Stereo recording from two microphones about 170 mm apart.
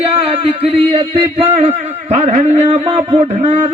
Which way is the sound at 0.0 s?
35° right (ahead or behind).